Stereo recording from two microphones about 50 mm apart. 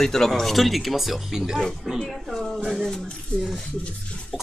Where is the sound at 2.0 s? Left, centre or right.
Centre.